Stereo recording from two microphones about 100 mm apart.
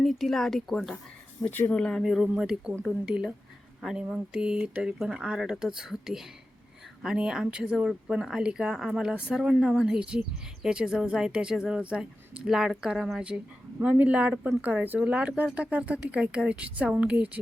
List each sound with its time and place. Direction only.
0.0 s speech: centre (ahead or behind)
1.5 s speech: 15° left (ahead or behind); by 13.4 s 10° right (ahead or behind)
13.7 s speech: 20° right (ahead or behind)